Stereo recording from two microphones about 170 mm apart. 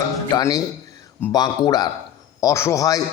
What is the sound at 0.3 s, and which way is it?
A man's voice, 20° left (ahead or behind).